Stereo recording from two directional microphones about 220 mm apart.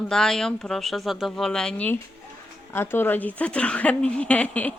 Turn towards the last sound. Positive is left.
turn(degrees=5)  # may be behind; listen again after turning